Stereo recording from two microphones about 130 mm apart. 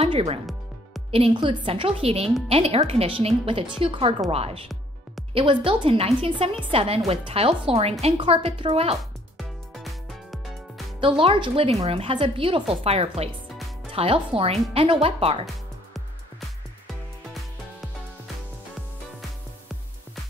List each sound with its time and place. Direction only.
0.1 s a woman's voice: 50° right (ahead or behind)
9.4 s music: centre (ahead or behind)
11.0 s a woman's voice: 45° right (ahead or behind)
15.4 s music: centre (ahead or behind)